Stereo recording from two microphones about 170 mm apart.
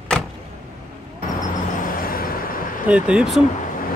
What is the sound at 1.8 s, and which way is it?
Vehicle, 60° left (ahead or behind).